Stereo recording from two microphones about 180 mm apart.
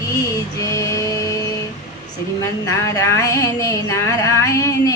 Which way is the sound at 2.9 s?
20° left (ahead or behind).